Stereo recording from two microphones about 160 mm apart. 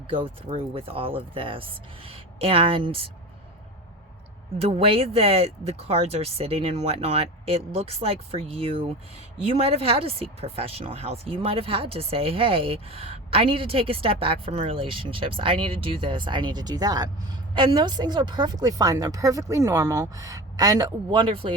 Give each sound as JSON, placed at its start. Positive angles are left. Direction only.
{"t": 0.1, "sound": "speech", "side_deg": -35}
{"t": 4.5, "sound": "speech", "side_deg": -40}